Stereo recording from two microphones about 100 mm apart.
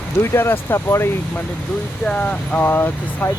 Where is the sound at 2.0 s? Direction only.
15° left (ahead or behind).